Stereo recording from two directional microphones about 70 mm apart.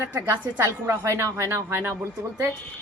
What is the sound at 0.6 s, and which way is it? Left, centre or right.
Speech, right.